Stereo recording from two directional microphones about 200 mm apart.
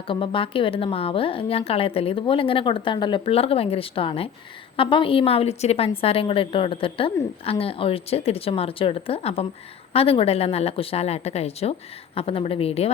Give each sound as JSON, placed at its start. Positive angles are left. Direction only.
{"t": 0.1, "sound": "a woman's voice", "side_deg": 25}